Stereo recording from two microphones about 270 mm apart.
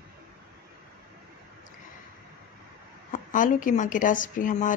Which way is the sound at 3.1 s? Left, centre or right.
Left.